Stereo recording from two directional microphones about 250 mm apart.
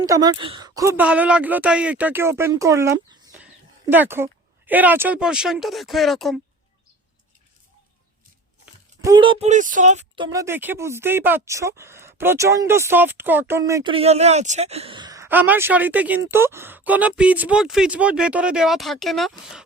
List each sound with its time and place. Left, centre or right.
0.0 s speech: centre
8.6 s speech: centre; by 10.2 s right
10.2 s speech: centre